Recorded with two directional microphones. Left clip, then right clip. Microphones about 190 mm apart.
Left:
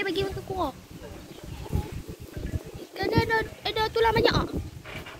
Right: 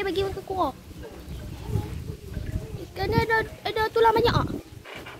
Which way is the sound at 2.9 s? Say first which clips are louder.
Right 1 dB; 5° right (ahead or behind).